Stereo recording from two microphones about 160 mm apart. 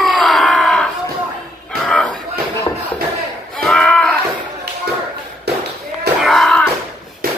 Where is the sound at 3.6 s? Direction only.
5° left (ahead or behind).